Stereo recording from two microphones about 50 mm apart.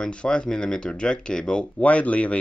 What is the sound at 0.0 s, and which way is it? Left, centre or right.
Speech, centre.